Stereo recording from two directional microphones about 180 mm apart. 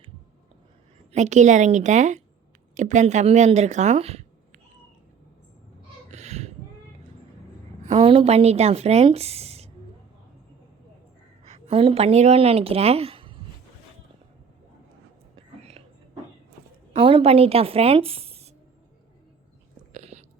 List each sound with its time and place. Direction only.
1.1 s speech: 40° right (ahead or behind)
6.1 s a sound: 40° right (ahead or behind)
7.9 s a woman's voice: 30° right (ahead or behind)
11.4 s a woman's voice: 40° right (ahead or behind)
15.4 s whispering: 35° right (ahead or behind)
16.9 s speech: 30° right (ahead or behind)
19.9 s a sound: 40° right (ahead or behind)